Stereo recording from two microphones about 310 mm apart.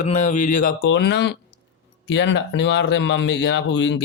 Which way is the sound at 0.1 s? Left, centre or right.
Left.